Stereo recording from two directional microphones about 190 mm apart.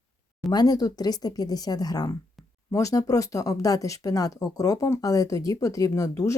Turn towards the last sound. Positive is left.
turn(degrees=20)  # may be behind; listen again after turning